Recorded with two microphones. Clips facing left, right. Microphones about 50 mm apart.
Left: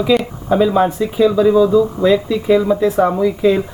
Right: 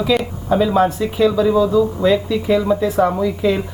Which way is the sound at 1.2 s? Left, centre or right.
Left.